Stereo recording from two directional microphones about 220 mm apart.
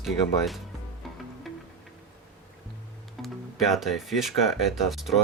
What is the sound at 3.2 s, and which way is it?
Speech, centre (ahead or behind).